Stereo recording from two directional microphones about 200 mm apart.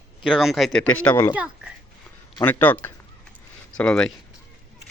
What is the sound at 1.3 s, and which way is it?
Speech, 5° right (ahead or behind).